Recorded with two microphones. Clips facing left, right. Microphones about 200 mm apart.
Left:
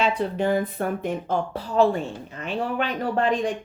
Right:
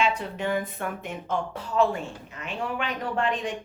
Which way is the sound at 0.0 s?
35° left (ahead or behind).